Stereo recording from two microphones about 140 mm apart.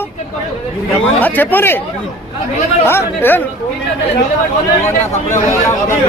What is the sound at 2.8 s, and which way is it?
Speech, 15° left (ahead or behind).